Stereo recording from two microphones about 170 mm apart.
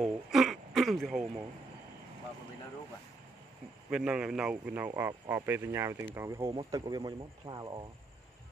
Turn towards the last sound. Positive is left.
turn(degrees=-25)  # may be behind; listen again after turning